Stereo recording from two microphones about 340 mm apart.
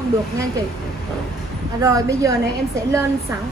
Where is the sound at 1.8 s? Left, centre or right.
Centre.